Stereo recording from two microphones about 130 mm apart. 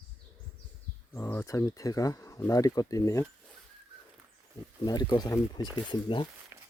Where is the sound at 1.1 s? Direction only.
20° left (ahead or behind).